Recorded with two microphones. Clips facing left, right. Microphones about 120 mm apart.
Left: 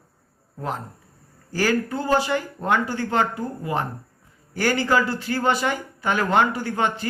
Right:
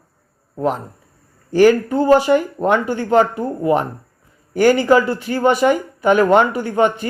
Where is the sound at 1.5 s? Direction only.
20° right (ahead or behind).